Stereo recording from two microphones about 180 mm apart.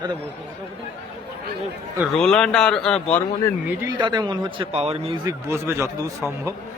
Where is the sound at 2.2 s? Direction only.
5° left (ahead or behind).